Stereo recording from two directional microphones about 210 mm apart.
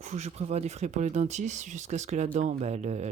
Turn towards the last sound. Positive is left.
turn(degrees=-35)  # may be behind; listen again after turning